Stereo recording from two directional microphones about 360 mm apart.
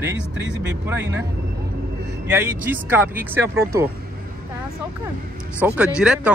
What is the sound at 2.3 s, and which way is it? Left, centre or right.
Speech, centre.